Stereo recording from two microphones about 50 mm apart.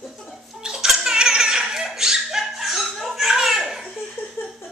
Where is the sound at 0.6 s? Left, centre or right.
Centre.